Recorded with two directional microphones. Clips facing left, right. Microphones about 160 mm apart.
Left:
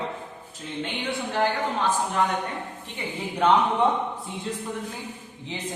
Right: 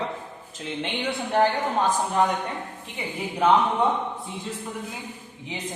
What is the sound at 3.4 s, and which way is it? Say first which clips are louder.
Speech: right 1 dB; 5° right (ahead or behind).